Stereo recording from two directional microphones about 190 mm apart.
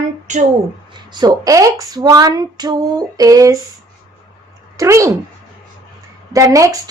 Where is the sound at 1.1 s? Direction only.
20° right (ahead or behind).